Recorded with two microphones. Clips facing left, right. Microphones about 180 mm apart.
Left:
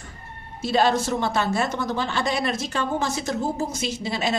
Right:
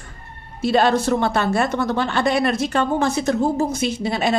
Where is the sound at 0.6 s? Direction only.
60° right (ahead or behind).